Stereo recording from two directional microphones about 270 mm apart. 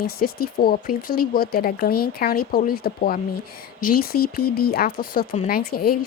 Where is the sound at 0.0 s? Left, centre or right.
Left.